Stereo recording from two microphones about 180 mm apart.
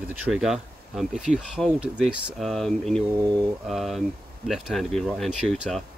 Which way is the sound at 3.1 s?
20° right (ahead or behind).